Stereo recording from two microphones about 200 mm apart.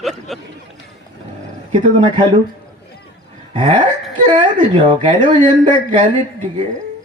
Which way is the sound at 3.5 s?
40° right (ahead or behind).